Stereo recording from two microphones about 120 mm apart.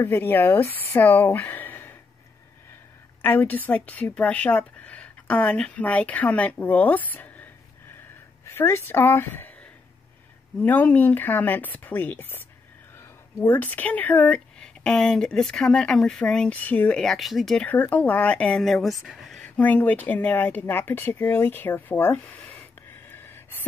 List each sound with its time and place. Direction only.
0.0 s speech: 15° left (ahead or behind)
3.2 s speech: 15° left (ahead or behind)
8.5 s speech: 20° left (ahead or behind)
10.6 s speech: 15° left (ahead or behind)
17.6 s speech: 10° left (ahead or behind)
18.6 s speech: centre (ahead or behind)
19.4 s speech: 10° left (ahead or behind)